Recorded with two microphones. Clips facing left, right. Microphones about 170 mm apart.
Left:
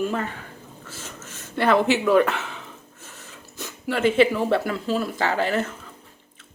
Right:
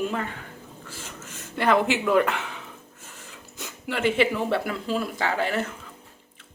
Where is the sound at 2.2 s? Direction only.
15° right (ahead or behind).